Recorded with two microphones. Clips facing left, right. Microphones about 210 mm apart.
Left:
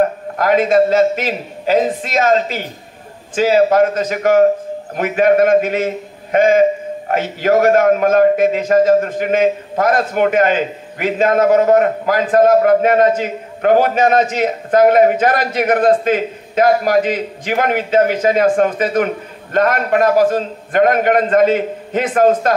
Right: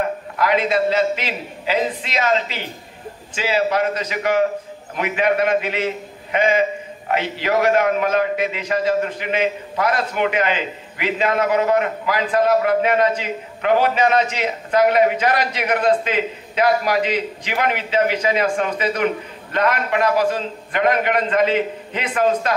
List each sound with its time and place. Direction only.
0.0 s a man's voice: 45° left (ahead or behind)